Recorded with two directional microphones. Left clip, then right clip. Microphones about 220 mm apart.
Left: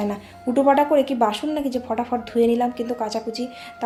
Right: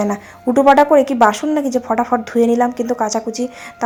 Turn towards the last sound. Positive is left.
turn(degrees=-25)  # may be behind; listen again after turning